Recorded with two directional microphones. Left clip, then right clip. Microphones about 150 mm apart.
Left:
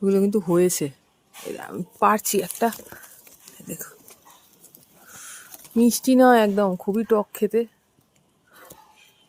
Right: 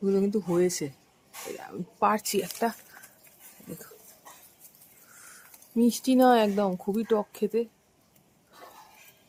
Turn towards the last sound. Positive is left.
turn(degrees=40)  # may be behind; listen again after turning